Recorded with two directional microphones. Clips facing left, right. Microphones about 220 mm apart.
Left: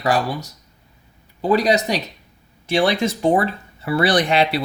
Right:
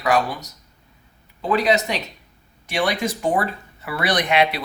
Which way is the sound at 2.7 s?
25° left (ahead or behind).